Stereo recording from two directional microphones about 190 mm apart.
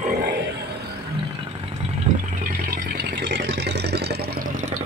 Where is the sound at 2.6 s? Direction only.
55° right (ahead or behind).